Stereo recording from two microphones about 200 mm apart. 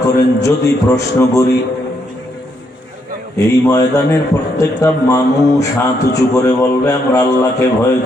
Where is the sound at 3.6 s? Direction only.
15° left (ahead or behind).